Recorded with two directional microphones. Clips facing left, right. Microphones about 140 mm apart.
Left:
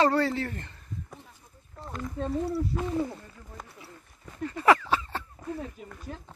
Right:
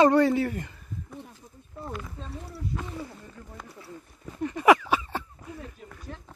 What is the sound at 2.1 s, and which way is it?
Speech, 60° left (ahead or behind).